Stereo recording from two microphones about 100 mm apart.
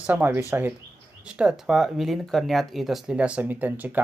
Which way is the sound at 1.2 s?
10° right (ahead or behind).